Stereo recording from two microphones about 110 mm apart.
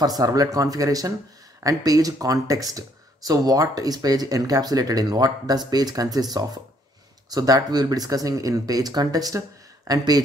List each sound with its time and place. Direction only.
0.0 s speech: 35° right (ahead or behind)